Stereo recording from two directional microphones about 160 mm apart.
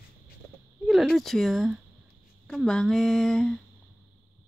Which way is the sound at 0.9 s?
Centre (ahead or behind).